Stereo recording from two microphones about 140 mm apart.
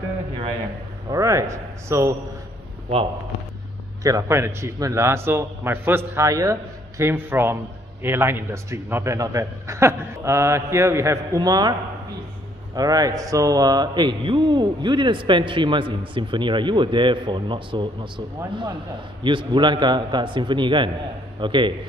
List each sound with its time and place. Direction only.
1.1 s a man's voice: 20° right (ahead or behind)
4.0 s a man's voice: 20° right (ahead or behind)
12.7 s speech: 25° right (ahead or behind)
19.2 s speech: 35° right (ahead or behind)